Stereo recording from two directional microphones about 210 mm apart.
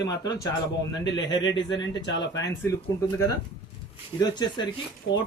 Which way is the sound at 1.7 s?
60° left (ahead or behind).